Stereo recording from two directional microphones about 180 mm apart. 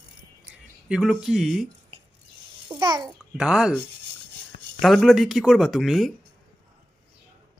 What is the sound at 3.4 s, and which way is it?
Speech, 5° right (ahead or behind).